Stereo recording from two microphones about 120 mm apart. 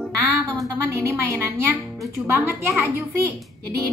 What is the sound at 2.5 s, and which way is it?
Speech, 20° right (ahead or behind).